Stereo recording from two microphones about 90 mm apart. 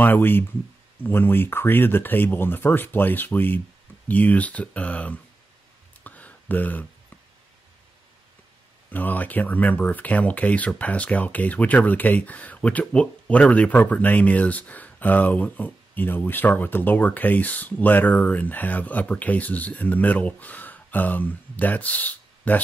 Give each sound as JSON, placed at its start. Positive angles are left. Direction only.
{"t": 0.0, "sound": "speech", "side_deg": 20}
{"t": 6.0, "sound": "a sound", "side_deg": 15}
{"t": 8.9, "sound": "speech", "side_deg": 20}